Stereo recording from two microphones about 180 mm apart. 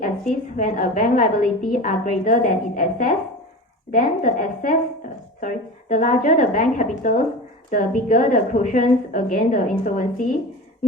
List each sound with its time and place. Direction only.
0.0 s a woman's voice: 50° left (ahead or behind)